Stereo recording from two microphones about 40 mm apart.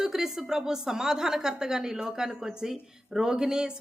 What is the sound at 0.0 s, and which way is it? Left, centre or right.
A woman's voice, centre.